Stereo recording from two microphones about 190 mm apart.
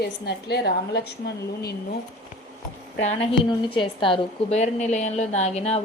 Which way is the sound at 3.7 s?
25° left (ahead or behind).